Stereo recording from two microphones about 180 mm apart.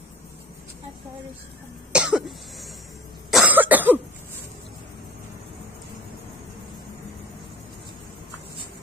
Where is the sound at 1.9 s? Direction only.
5° right (ahead or behind).